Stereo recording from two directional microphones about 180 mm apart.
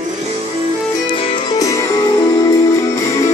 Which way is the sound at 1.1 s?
25° left (ahead or behind).